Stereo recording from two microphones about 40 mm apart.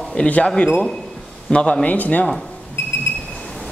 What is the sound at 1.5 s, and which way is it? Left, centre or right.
Speech, left.